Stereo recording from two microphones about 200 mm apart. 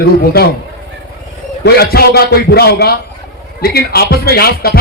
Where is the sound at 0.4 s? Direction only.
50° left (ahead or behind).